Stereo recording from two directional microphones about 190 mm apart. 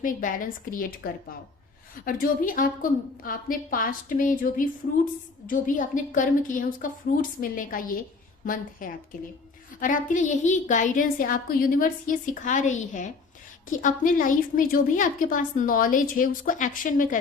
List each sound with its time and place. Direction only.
0.0 s a woman's voice: 45° left (ahead or behind)
9.8 s a woman's voice: 45° left (ahead or behind)